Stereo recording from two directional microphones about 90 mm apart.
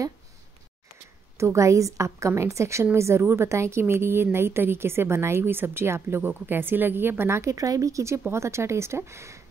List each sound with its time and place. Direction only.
1.4 s a woman's voice: 35° right (ahead or behind)